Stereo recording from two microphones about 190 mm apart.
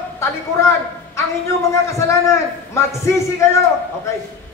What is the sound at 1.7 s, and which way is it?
A man's voice, 15° left (ahead or behind).